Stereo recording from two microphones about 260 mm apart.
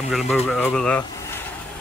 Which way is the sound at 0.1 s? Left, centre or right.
Centre.